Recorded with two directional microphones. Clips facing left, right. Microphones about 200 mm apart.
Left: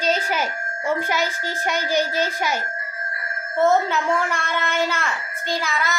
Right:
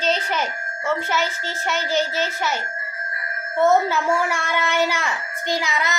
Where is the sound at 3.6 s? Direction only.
Centre (ahead or behind); by 5.9 s 20° right (ahead or behind).